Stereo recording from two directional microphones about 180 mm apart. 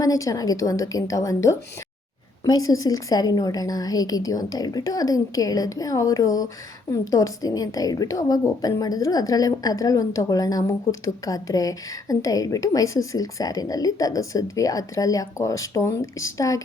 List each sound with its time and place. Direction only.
0.0 s a woman's voice: 20° left (ahead or behind)